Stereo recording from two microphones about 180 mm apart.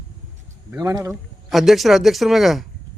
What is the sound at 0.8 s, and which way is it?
Speech, 20° right (ahead or behind).